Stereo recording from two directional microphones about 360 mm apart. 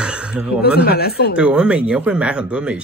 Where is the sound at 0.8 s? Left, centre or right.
Left.